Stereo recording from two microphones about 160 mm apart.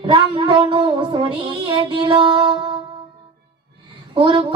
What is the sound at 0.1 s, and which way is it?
Music, 30° right (ahead or behind).